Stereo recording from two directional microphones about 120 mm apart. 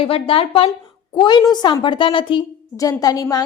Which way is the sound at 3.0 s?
30° left (ahead or behind).